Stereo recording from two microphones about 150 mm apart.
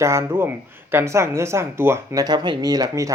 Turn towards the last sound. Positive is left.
turn(degrees=-20)  # may be behind; listen again after turning